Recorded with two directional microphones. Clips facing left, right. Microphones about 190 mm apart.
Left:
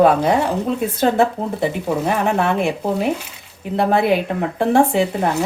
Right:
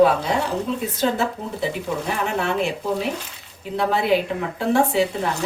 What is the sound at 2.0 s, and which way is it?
Speech, 55° left (ahead or behind).